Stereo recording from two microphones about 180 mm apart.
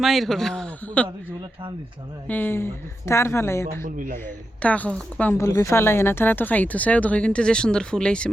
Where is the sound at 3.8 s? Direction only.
50° right (ahead or behind).